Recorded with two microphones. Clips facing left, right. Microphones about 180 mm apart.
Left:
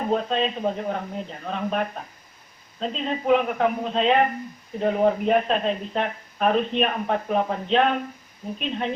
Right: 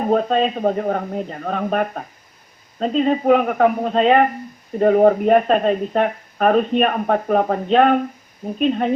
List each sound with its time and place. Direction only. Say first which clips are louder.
0.1 s speech: right 7 dB; 50° right (ahead or behind)